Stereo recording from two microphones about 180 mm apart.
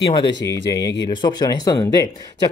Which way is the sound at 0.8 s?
75° left (ahead or behind).